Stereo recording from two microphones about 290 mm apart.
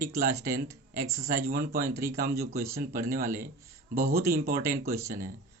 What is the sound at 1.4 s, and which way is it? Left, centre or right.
Speech, right.